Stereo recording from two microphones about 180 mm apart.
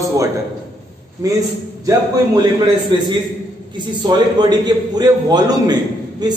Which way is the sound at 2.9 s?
25° right (ahead or behind).